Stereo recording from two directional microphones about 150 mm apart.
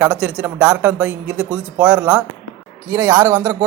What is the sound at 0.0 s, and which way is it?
Speech, 10° right (ahead or behind).